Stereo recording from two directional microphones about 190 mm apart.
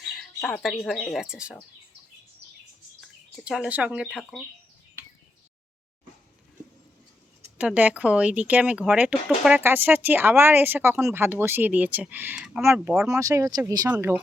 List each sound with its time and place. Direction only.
0.1 s speech: centre (ahead or behind)
3.4 s speech: 5° right (ahead or behind)
7.4 s speech: 10° right (ahead or behind)
13.1 s speech: 15° right (ahead or behind)